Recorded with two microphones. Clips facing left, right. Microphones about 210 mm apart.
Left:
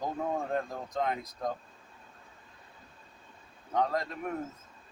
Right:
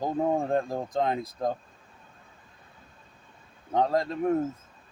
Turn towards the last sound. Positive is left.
turn(degrees=-30)  # may be behind; listen again after turning